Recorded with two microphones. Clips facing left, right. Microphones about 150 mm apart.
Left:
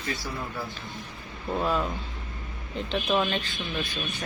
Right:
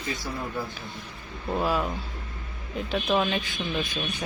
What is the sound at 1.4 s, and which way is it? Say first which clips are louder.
Speech: right 1 dB; 5° right (ahead or behind).